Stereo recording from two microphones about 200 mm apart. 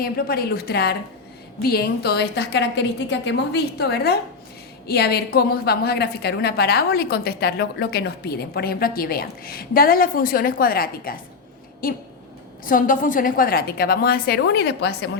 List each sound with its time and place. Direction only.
0.0 s a woman's voice: 50° left (ahead or behind)